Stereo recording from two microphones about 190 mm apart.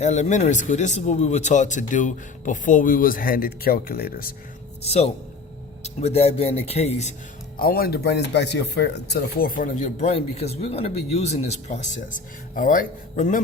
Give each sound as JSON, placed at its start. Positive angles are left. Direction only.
{"t": 0.0, "sound": "speech", "side_deg": 35}
{"t": 4.8, "sound": "speech", "side_deg": 35}
{"t": 7.5, "sound": "speech", "side_deg": 50}